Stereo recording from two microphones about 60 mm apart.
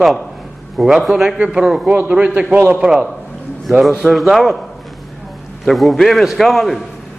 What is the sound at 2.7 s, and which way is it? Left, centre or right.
A man's voice, centre.